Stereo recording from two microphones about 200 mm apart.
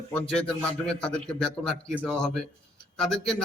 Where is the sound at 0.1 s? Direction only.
5° left (ahead or behind).